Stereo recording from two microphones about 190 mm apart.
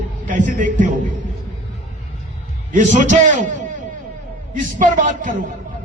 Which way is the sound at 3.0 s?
40° right (ahead or behind).